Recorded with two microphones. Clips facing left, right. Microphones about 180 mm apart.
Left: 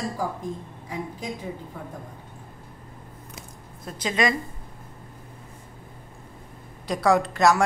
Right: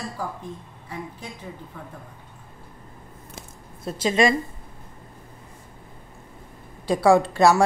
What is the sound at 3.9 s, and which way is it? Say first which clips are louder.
Speech: right 4 dB; 25° right (ahead or behind).